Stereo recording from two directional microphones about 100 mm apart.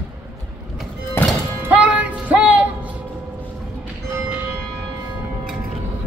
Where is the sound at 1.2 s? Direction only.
25° left (ahead or behind).